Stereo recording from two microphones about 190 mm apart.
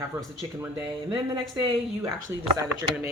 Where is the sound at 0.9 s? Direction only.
25° right (ahead or behind).